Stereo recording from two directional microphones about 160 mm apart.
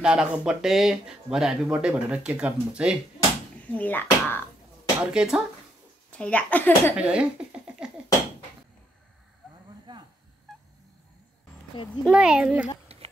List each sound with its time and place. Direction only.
0.0 s speech: 5° right (ahead or behind)
3.2 s a sound: 20° left (ahead or behind)
3.7 s speech: 10° left (ahead or behind)
5.0 s speech: 5° right (ahead or behind)
6.1 s speech: 10° left (ahead or behind)
7.0 s speech: 5° right (ahead or behind)
12.1 s speech: 5° right (ahead or behind)
12.9 s a sound: 40° right (ahead or behind)